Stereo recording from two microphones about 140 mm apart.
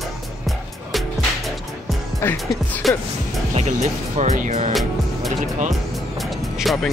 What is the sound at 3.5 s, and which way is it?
Speech, 55° right (ahead or behind).